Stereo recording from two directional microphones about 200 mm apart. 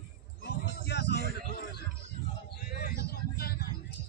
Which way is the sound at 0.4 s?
55° left (ahead or behind).